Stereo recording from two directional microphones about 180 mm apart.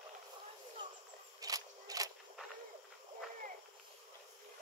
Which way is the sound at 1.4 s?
20° right (ahead or behind).